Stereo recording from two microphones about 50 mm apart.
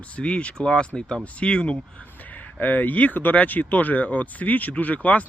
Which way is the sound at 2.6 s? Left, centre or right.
Left.